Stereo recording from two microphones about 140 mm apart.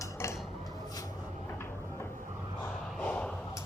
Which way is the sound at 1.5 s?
15° left (ahead or behind).